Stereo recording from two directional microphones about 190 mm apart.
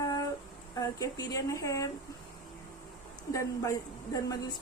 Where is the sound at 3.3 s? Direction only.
15° left (ahead or behind).